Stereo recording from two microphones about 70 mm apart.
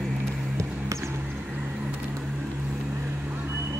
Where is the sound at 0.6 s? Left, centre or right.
Right.